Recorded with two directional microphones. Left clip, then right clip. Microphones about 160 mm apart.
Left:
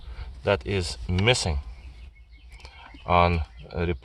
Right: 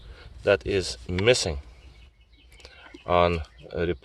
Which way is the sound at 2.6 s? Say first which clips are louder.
Left 1 dB; 35° right (ahead or behind).